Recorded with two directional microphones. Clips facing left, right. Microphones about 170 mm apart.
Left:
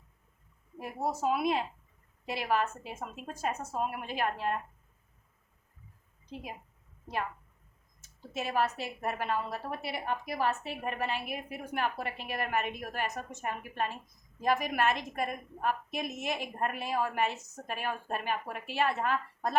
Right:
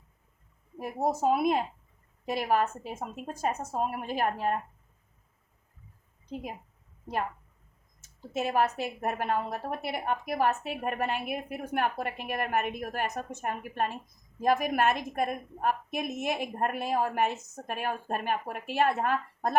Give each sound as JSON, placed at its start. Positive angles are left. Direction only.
{"t": 0.8, "sound": "a woman's voice", "side_deg": -45}
{"t": 8.3, "sound": "a woman's voice", "side_deg": -50}